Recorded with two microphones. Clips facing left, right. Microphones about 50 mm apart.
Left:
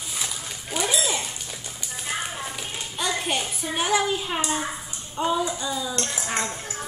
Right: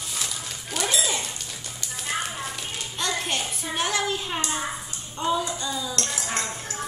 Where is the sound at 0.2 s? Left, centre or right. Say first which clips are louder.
Left 1 dB; centre.